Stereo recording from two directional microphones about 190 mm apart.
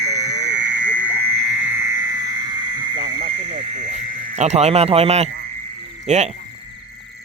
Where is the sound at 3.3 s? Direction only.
35° right (ahead or behind).